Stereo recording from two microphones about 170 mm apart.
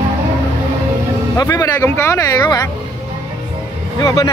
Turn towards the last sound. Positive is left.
turn(degrees=20)  # may be behind; listen again after turning